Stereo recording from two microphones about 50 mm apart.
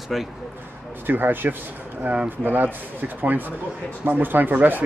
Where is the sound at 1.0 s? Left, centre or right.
Right.